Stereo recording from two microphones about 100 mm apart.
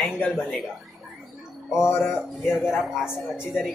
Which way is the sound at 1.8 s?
20° left (ahead or behind).